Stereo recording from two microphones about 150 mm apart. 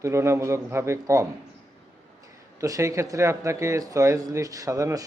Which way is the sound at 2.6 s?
20° right (ahead or behind).